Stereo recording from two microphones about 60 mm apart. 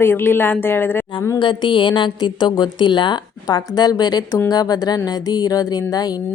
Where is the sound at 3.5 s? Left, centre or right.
Left.